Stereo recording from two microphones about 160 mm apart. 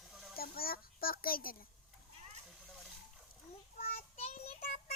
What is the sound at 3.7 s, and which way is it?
Child singing, 50° left (ahead or behind).